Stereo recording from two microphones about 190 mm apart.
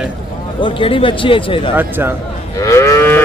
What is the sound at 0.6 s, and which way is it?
Speech, 25° left (ahead or behind).